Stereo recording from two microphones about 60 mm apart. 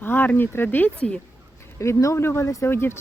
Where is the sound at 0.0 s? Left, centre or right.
Left.